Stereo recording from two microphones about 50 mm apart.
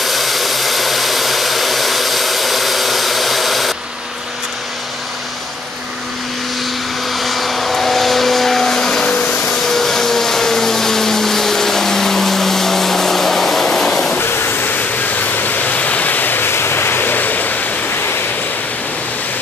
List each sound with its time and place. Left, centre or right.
0.0 s hair dryer: centre
7.1 s vehicle: centre
9.0 s vacuum cleaner: left
9.4 s vacuum cleaner: centre
14.2 s waterfall: left